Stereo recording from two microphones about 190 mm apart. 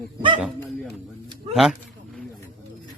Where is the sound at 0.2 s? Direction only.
25° right (ahead or behind).